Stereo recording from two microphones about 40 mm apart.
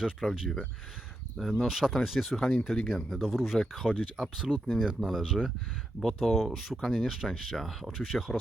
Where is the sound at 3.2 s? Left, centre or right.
Centre.